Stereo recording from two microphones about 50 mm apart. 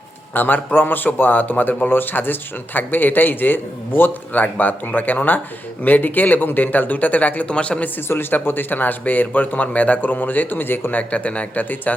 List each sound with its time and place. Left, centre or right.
0.3 s a man's voice: left
8.0 s a man's voice: left
10.9 s a man's voice: left